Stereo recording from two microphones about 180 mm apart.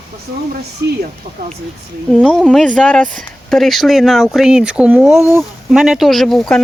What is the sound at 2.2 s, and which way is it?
Speech, centre (ahead or behind).